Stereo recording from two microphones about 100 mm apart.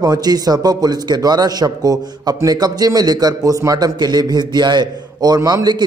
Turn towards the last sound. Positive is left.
turn(degrees=-40)  # may be behind; listen again after turning